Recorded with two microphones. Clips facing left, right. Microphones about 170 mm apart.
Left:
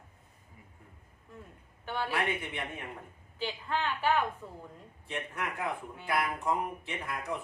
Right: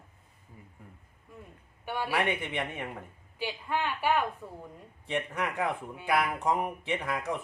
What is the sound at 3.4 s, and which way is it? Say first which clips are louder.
A woman's voice: right 1 dB; 10° right (ahead or behind).